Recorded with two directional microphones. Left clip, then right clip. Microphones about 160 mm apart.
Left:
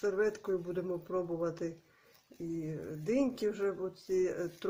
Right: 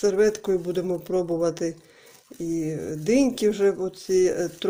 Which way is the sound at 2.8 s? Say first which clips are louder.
Right 11 dB; 30° right (ahead or behind).